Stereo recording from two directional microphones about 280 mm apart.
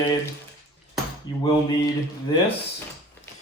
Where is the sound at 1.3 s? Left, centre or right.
Centre.